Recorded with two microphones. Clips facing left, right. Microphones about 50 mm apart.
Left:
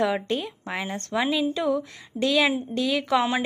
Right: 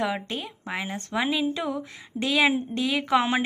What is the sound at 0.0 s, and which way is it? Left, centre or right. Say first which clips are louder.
A woman's voice: left 4 dB; centre.